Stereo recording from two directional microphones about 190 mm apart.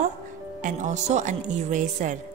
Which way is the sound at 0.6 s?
40° right (ahead or behind).